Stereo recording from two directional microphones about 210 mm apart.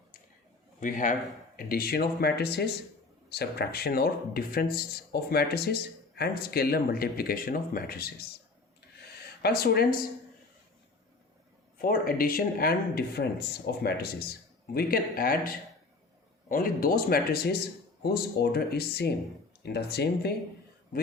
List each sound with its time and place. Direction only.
0.8 s a man's voice: 40° left (ahead or behind)
9.4 s speech: 50° left (ahead or behind)
11.8 s a man's voice: 45° left (ahead or behind)